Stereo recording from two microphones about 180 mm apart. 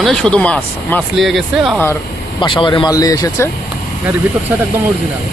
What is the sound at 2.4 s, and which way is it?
Speech, 25° left (ahead or behind).